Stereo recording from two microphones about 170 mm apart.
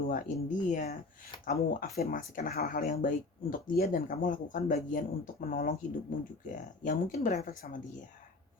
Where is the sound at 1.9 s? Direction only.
65° left (ahead or behind).